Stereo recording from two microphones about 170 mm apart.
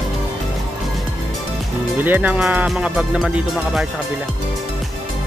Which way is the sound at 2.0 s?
10° right (ahead or behind).